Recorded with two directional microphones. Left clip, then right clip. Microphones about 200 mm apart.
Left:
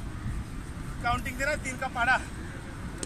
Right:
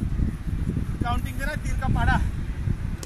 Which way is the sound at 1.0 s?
30° left (ahead or behind).